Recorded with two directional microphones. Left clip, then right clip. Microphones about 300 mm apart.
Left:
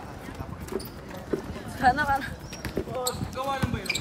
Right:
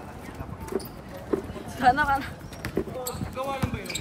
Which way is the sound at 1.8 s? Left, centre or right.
Right.